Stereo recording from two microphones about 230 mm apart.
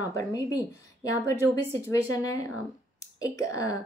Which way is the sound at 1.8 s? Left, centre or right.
Centre.